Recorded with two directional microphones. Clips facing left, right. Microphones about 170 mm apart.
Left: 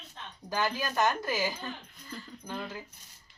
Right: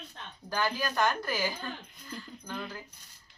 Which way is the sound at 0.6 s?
5° left (ahead or behind).